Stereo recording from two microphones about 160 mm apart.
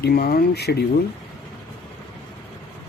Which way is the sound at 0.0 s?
75° left (ahead or behind).